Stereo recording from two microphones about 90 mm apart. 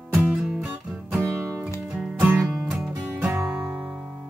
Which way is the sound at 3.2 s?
15° right (ahead or behind).